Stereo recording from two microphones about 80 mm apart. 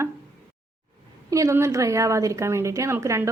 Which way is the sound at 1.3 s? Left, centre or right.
Right.